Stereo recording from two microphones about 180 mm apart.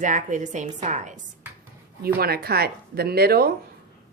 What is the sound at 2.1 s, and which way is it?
Speech, 60° right (ahead or behind).